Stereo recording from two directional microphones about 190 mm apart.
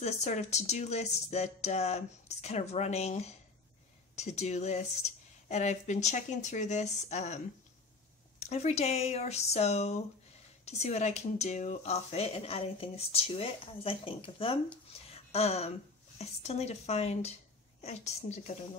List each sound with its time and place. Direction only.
0.0 s speech: 35° left (ahead or behind)
8.4 s speech: 35° left (ahead or behind)
14.9 s a sound: 30° left (ahead or behind)
15.3 s speech: 35° left (ahead or behind)